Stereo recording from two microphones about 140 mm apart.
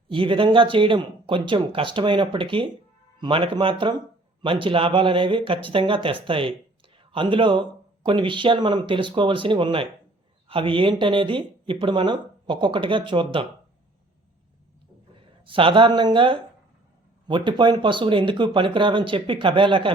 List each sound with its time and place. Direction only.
0.1 s speech: 40° right (ahead or behind)
15.4 s speech: 40° right (ahead or behind)